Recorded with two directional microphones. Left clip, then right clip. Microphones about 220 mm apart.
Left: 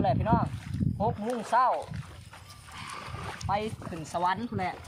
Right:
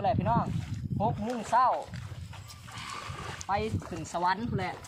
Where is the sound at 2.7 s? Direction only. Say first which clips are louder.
Even; 50° right (ahead or behind).